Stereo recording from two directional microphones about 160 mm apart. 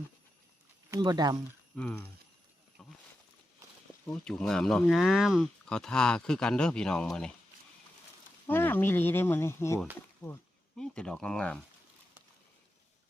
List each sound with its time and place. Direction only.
0.9 s speech: 25° right (ahead or behind)
1.7 s speech: 5° left (ahead or behind)
4.0 s speech: 5° left (ahead or behind)
8.4 s speech: 10° left (ahead or behind)
10.8 s speech: 5° left (ahead or behind)